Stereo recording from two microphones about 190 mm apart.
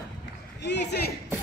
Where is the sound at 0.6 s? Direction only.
65° left (ahead or behind).